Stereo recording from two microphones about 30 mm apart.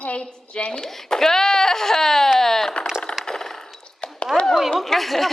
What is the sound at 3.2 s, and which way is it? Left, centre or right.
Coin, centre.